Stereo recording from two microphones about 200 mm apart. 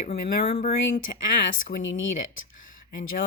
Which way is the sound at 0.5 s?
45° left (ahead or behind).